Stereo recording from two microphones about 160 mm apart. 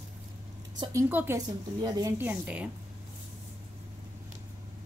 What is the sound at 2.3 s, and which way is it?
Speech, 10° right (ahead or behind).